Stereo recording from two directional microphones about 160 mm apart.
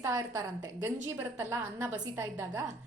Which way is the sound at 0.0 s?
20° right (ahead or behind).